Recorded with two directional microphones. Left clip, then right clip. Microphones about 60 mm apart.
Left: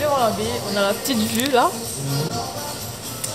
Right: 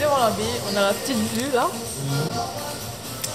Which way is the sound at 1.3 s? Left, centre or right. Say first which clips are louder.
Left 5 dB; left.